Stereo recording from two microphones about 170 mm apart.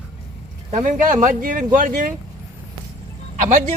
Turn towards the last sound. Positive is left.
turn(degrees=-45)  # may be behind; listen again after turning